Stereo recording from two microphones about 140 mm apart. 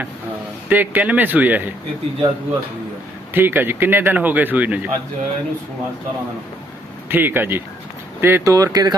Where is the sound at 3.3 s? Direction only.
15° right (ahead or behind).